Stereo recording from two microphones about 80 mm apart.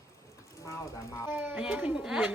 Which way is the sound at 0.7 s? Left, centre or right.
Left.